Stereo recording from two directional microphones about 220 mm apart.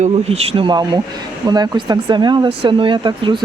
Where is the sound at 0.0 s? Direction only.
25° right (ahead or behind).